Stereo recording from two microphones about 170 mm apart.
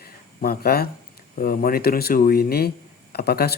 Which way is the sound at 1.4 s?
55° left (ahead or behind).